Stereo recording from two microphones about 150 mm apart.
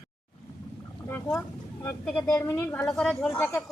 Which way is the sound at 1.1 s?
15° left (ahead or behind).